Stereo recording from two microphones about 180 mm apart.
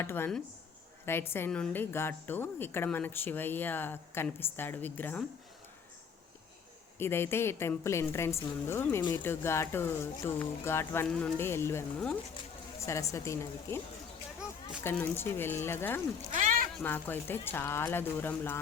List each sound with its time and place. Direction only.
0.0 s a woman's voice: 15° left (ahead or behind)
7.0 s a woman's voice: 15° left (ahead or behind)
14.8 s a woman's voice: 10° left (ahead or behind)
16.3 s a sound: 45° right (ahead or behind)
16.8 s a woman's voice: 10° left (ahead or behind)